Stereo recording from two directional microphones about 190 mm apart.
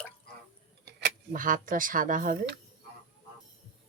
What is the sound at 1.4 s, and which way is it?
Speech, 45° right (ahead or behind).